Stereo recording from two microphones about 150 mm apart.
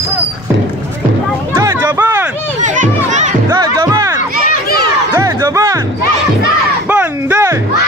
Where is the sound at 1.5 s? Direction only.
20° right (ahead or behind).